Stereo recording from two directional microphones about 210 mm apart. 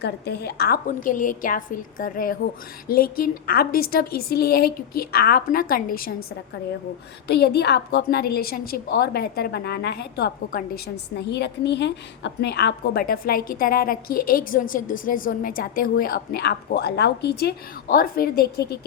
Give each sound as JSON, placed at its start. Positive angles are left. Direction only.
{"t": 0.0, "sound": "a woman's voice", "side_deg": 50}
{"t": 7.3, "sound": "a woman's voice", "side_deg": 50}